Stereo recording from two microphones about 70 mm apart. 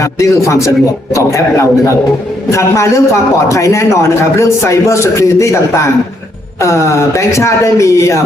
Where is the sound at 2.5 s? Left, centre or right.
Left.